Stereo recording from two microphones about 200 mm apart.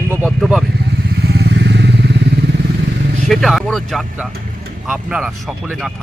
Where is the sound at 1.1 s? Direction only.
55° right (ahead or behind).